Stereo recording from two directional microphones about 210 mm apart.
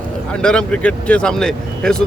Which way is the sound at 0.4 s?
5° left (ahead or behind).